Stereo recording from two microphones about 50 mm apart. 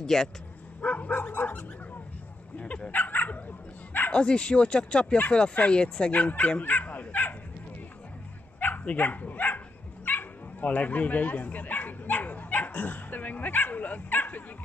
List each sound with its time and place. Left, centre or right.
0.0 s speech: centre
0.7 s dog: left
2.5 s speech: left
2.9 s bow-wow: left
4.1 s speech: left
6.6 s dog: left
8.5 s bow-wow: left
8.8 s dog: left
10.0 s bow-wow: left